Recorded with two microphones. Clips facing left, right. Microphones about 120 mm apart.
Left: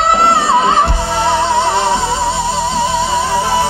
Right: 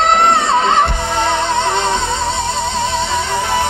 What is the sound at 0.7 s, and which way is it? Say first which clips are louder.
Music: left 1 dB; 20° right (ahead or behind).